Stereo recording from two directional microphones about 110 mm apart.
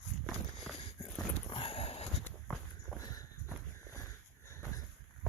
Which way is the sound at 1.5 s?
55° left (ahead or behind).